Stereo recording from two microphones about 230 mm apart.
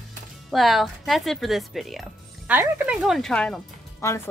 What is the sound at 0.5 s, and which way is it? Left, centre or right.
Speech, centre.